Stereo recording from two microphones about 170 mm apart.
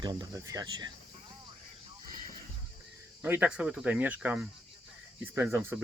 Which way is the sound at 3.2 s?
10° right (ahead or behind).